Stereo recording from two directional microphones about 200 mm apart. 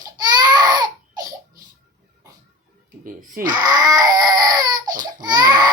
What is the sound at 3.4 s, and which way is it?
Baby cry, 20° right (ahead or behind).